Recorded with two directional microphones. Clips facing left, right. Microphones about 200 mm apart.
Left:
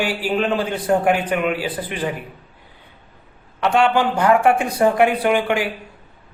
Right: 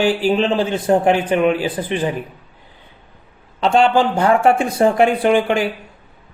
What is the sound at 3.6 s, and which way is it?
Speech, 25° right (ahead or behind).